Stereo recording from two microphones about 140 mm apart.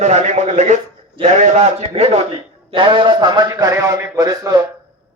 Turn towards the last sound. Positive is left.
turn(degrees=-25)  # may be behind; listen again after turning